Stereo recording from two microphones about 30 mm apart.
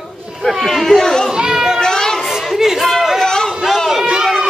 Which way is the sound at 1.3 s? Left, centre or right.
Centre.